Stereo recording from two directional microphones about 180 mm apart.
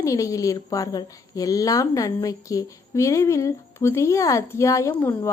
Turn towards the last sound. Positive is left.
turn(degrees=15)  # may be behind; listen again after turning